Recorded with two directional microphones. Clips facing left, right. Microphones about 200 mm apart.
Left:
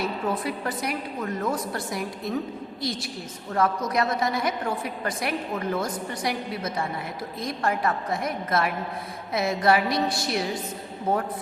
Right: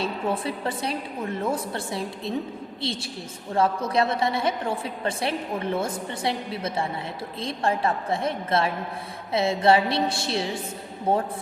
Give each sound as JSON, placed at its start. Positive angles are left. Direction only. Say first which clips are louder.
{"t": 0.0, "sound": "a woman's voice", "louder": "even", "side_deg": -30}